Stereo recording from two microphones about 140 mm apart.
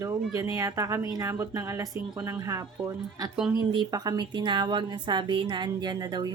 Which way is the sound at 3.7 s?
30° right (ahead or behind).